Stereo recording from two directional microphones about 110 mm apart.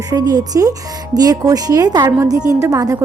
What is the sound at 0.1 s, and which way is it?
Speech, 35° right (ahead or behind).